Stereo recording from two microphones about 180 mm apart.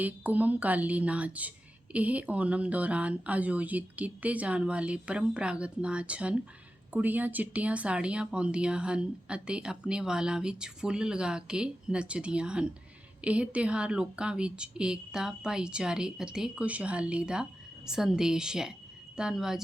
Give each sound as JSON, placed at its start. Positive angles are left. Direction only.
{"t": 0.0, "sound": "a woman's voice", "side_deg": -10}